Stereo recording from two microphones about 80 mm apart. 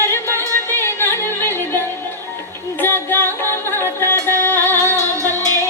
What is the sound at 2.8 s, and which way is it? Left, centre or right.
Music, left.